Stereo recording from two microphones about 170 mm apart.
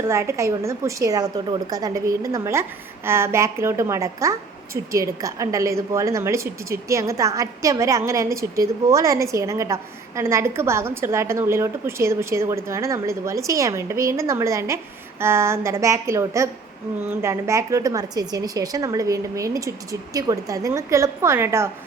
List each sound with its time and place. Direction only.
0.1 s a woman's voice: 15° right (ahead or behind)